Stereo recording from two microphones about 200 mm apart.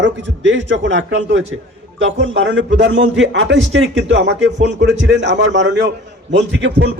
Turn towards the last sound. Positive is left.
turn(degrees=-60)  # may be behind; listen again after turning